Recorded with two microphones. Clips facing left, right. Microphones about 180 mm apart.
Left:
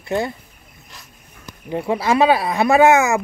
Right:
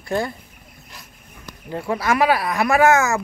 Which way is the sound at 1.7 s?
25° left (ahead or behind).